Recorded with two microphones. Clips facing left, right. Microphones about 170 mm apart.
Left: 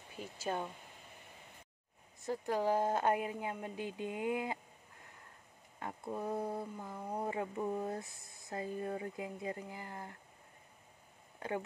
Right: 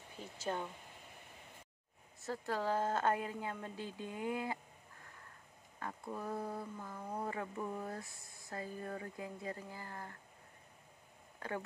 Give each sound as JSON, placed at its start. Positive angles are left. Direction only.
{"t": 0.4, "sound": "speech", "side_deg": 10}
{"t": 2.2, "sound": "speech", "side_deg": 15}
{"t": 5.8, "sound": "speech", "side_deg": 25}
{"t": 11.3, "sound": "speech", "side_deg": 20}